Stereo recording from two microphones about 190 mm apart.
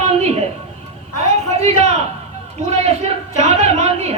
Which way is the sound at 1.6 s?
35° right (ahead or behind).